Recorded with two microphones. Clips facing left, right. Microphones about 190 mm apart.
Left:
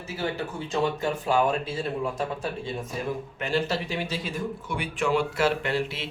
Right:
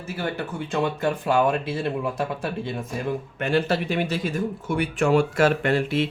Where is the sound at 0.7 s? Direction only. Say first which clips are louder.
Right 2 dB; 60° right (ahead or behind).